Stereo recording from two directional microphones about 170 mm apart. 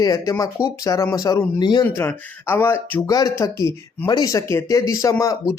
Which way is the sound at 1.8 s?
10° left (ahead or behind).